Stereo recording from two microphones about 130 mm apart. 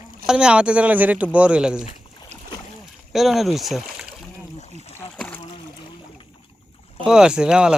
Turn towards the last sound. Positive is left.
turn(degrees=-5)  # may be behind; listen again after turning